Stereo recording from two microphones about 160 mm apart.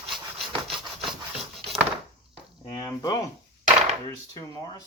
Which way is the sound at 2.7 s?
25° left (ahead or behind).